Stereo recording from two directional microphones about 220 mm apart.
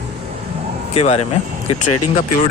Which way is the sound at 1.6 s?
90° left.